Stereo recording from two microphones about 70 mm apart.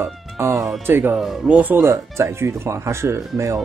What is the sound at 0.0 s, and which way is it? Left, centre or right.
Music, right.